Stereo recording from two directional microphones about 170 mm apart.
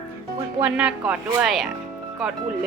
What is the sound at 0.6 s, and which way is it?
A woman's voice, 5° right (ahead or behind).